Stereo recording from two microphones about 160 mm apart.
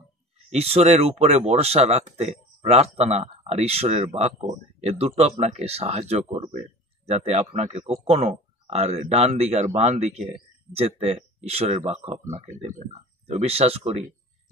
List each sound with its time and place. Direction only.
0.5 s speech: 40° right (ahead or behind)